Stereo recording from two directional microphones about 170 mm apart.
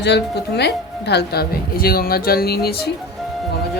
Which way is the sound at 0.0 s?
80° left.